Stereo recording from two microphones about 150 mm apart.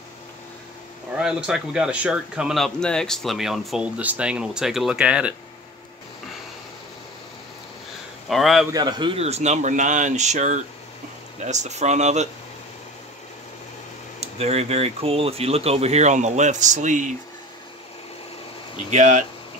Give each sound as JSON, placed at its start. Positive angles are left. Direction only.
{"t": 1.1, "sound": "speech", "side_deg": -5}
{"t": 8.3, "sound": "speech", "side_deg": 0}
{"t": 8.7, "sound": "a man's voice", "side_deg": -30}
{"t": 9.2, "sound": "speech", "side_deg": -45}
{"t": 14.2, "sound": "speech", "side_deg": -45}
{"t": 18.9, "sound": "speech", "side_deg": -55}